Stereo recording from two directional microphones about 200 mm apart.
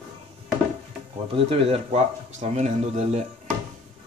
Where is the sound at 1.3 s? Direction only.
30° right (ahead or behind).